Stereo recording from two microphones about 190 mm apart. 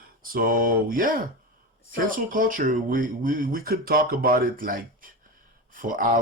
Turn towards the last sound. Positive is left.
turn(degrees=-45)  # may be behind; listen again after turning